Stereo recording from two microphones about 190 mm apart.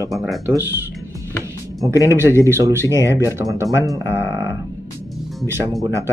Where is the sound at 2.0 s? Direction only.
15° right (ahead or behind).